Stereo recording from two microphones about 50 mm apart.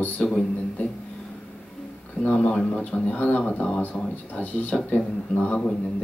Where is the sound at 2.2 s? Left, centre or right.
Left.